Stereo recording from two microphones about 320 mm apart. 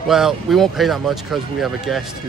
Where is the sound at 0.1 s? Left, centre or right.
Centre.